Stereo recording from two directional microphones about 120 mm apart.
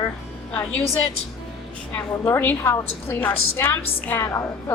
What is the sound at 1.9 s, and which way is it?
A woman's voice, 15° left (ahead or behind).